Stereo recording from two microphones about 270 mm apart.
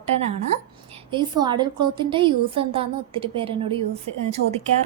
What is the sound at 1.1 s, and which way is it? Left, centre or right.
A woman's voice, centre.